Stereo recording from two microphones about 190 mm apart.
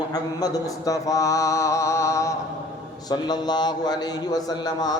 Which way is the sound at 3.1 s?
20° left (ahead or behind).